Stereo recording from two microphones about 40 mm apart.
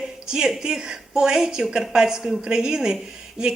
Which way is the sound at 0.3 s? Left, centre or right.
Centre.